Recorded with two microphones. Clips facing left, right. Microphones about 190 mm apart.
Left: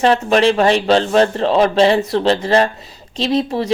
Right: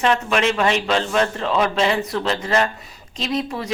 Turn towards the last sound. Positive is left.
turn(degrees=30)  # may be behind; listen again after turning